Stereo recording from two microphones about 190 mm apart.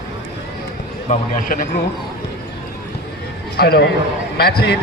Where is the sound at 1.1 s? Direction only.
45° left (ahead or behind).